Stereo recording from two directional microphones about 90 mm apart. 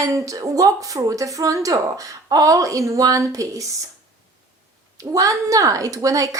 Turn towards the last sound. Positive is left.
turn(degrees=-40)  # may be behind; listen again after turning